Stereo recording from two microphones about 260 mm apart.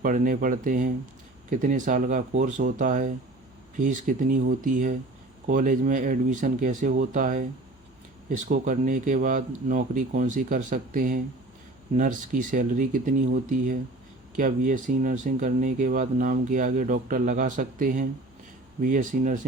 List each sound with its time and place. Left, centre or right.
0.0 s speech: right